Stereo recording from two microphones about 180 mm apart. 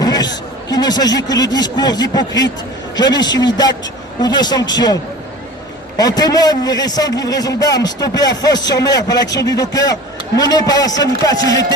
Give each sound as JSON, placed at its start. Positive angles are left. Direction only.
{"t": 0.0, "sound": "a sound", "side_deg": 20}
{"t": 0.7, "sound": "a man's voice", "side_deg": 20}
{"t": 6.0, "sound": "a man's voice", "side_deg": 20}